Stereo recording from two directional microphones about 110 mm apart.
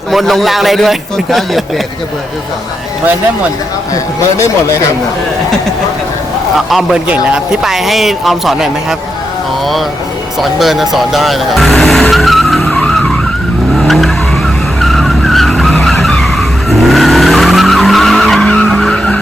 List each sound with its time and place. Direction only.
0.1 s speech: centre (ahead or behind)
3.9 s speech: 30° left (ahead or behind)
7.1 s speech: 5° right (ahead or behind)
10.4 s speech: centre (ahead or behind)
13.7 s vehicle: centre (ahead or behind)